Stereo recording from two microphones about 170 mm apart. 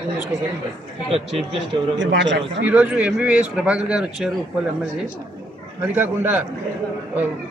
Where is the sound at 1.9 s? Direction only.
90° right.